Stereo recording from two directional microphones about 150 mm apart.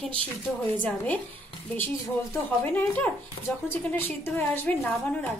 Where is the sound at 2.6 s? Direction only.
10° left (ahead or behind).